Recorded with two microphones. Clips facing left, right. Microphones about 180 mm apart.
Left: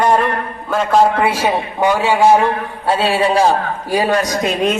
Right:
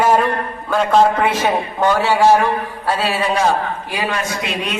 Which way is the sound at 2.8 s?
25° left (ahead or behind).